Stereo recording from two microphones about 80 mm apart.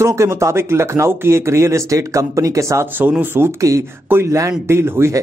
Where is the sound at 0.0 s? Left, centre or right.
Right.